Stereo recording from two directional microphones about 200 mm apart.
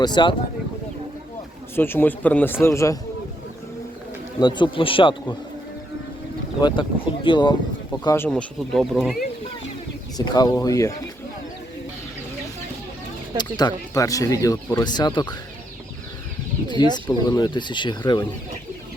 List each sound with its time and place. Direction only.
0.0 s speech: 20° left (ahead or behind)
1.7 s speech: 10° left (ahead or behind)
4.4 s speech: 20° left (ahead or behind)
6.6 s speech: 25° left (ahead or behind)
7.9 s speech: 10° left (ahead or behind)
10.2 s speech: 20° left (ahead or behind)
13.4 s speech: 20° left (ahead or behind)
16.6 s speech: 20° left (ahead or behind)